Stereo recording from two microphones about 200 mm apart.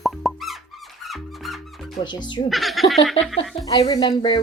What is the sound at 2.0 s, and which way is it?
Speech, 25° left (ahead or behind).